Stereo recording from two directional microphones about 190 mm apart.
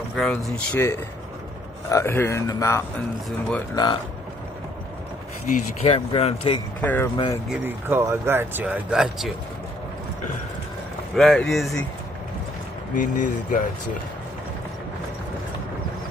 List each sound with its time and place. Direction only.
0.1 s a man's voice: centre (ahead or behind)
3.3 s speech: 5° left (ahead or behind)
3.7 s speech: 25° left (ahead or behind)
5.5 s speech: 30° left (ahead or behind)
6.8 s speech: 10° left (ahead or behind)
7.4 s speech: 10° right (ahead or behind)
11.1 s speech: centre (ahead or behind)
12.9 s speech: 45° left (ahead or behind)